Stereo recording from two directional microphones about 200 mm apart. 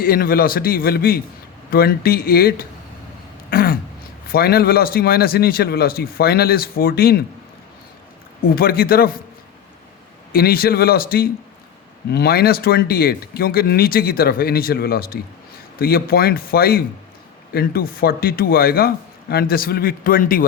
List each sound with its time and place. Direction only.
0.0 s speech: 45° left (ahead or behind)
3.5 s throat clearing: 50° left (ahead or behind)
4.3 s speech: 50° left (ahead or behind)
8.4 s speech: 50° left (ahead or behind)
10.3 s speech: 50° left (ahead or behind)